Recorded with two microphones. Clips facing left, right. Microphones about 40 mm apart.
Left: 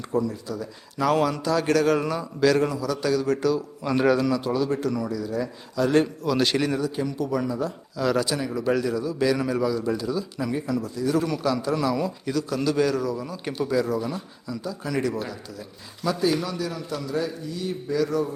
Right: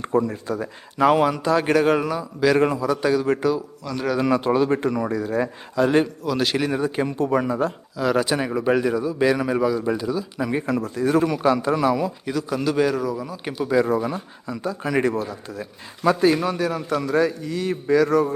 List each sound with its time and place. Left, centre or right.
0.0 s a man's voice: right
1.2 s a man's voice: right
2.0 s a man's voice: centre
2.6 s a man's voice: right
3.8 s speech: centre
4.2 s a man's voice: right
6.2 s a man's voice: centre
7.1 s a man's voice: right
10.5 s a man's voice: right
11.9 s a man's voice: centre
13.7 s a man's voice: right